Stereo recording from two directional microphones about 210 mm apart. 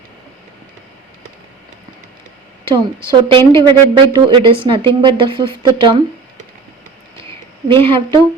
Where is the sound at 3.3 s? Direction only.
20° right (ahead or behind).